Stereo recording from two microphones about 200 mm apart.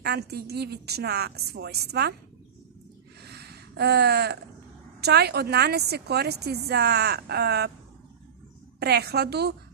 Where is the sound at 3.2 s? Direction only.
55° right (ahead or behind).